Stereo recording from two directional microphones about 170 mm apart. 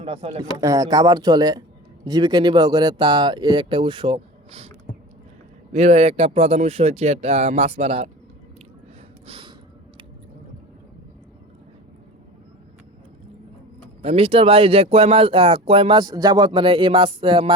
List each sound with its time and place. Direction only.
0.0 s speech: 35° right (ahead or behind)
0.6 s speech: 20° right (ahead or behind)
5.7 s speech: 40° right (ahead or behind)
9.2 s snort: 35° right (ahead or behind)
14.0 s speech: 35° right (ahead or behind)